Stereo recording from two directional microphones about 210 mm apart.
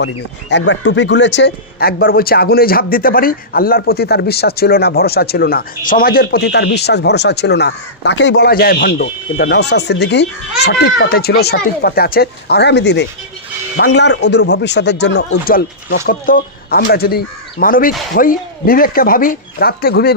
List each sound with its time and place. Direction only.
0.5 s speech: 60° left (ahead or behind)